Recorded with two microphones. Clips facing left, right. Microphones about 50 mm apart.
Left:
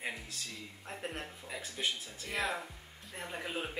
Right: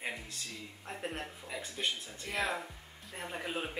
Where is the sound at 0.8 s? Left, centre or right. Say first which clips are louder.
Right 2 dB; centre.